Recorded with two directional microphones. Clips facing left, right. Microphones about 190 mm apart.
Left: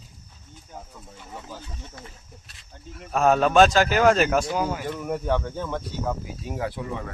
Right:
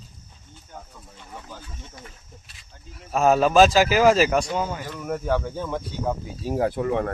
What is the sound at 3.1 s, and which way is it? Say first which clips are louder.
A man's voice: right 1 dB; 5° right (ahead or behind).